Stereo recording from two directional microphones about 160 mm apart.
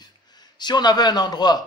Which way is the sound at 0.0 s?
25° left (ahead or behind).